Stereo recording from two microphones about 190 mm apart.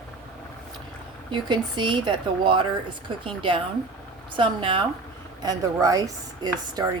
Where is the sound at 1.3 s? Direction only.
25° right (ahead or behind).